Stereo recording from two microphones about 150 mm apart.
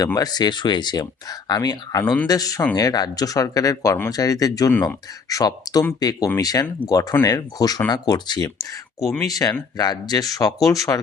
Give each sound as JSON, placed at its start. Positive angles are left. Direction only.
{"t": 0.0, "sound": "speech", "side_deg": 25}
{"t": 4.7, "sound": "speech", "side_deg": 10}
{"t": 5.3, "sound": "speech", "side_deg": 25}